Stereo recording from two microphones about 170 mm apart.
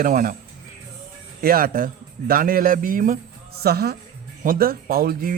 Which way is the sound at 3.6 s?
70° right (ahead or behind).